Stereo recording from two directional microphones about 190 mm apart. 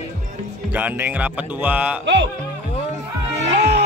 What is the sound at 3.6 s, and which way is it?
Music, 60° right (ahead or behind).